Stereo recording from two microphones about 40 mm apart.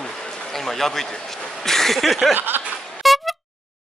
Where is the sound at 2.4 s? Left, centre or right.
Right.